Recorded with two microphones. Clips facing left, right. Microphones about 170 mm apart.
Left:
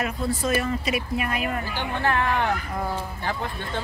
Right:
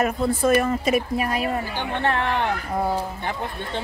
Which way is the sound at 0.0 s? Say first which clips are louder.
Right 5 dB; 55° right (ahead or behind).